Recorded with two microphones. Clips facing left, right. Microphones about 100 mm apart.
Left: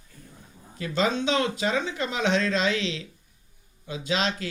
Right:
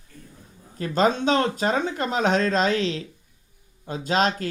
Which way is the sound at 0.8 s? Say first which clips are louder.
Right 4 dB; 45° right (ahead or behind).